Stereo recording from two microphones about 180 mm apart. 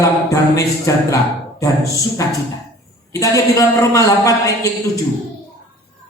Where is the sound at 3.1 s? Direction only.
20° left (ahead or behind).